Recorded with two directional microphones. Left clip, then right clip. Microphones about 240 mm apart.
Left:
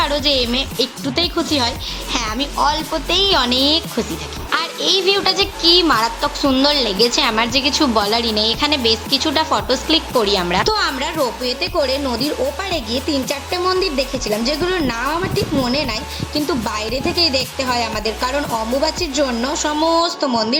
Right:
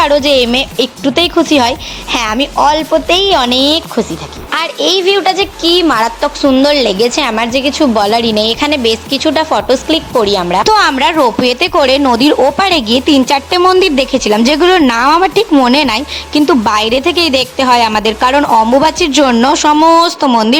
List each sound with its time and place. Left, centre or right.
0.0 s speech: right
10.7 s speech: right